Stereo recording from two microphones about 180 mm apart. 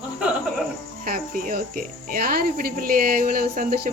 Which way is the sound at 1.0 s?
55° right (ahead or behind).